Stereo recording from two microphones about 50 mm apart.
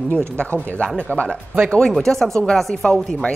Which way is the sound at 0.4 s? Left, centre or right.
Left.